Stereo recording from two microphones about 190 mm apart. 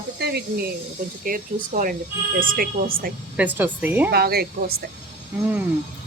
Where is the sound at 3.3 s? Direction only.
10° right (ahead or behind).